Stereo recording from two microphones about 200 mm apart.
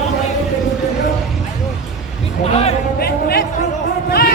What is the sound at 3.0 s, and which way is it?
Speech, 50° left (ahead or behind).